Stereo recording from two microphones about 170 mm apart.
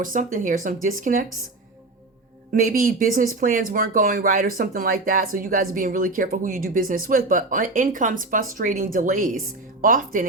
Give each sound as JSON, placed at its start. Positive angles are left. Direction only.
{"t": 0.0, "sound": "speech", "side_deg": -50}
{"t": 2.5, "sound": "speech", "side_deg": -55}